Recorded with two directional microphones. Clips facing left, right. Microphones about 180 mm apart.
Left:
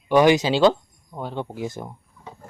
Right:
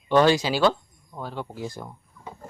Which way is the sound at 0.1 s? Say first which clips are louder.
Left 3 dB; 15° left (ahead or behind).